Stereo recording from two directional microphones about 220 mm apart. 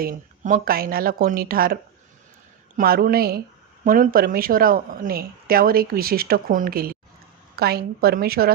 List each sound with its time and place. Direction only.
0.0 s a woman's voice: 40° right (ahead or behind)